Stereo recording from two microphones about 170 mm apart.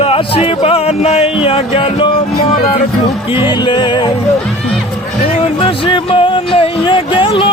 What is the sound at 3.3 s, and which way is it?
Music, 25° left (ahead or behind).